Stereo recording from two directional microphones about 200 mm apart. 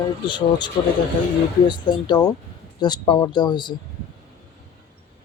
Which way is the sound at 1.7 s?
20° left (ahead or behind).